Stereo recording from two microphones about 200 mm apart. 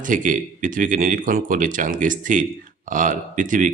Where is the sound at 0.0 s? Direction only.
40° right (ahead or behind).